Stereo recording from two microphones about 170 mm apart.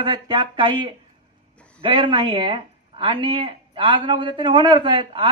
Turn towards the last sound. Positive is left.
turn(degrees=-30)  # may be behind; listen again after turning